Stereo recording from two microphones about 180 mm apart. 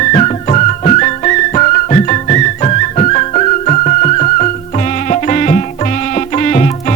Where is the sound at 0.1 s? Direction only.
40° left (ahead or behind).